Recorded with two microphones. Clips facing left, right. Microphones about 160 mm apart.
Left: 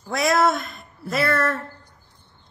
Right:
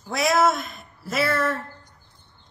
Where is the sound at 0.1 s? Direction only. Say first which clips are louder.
Left 1 dB; centre (ahead or behind).